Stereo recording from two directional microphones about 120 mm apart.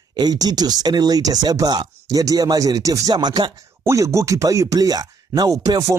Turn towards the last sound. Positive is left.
turn(degrees=-30)  # may be behind; listen again after turning